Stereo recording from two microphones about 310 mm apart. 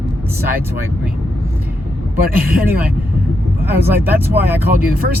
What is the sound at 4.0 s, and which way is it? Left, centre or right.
Speech, centre.